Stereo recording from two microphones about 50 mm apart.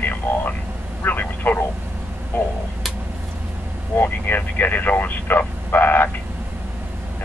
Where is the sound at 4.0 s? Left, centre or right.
Left.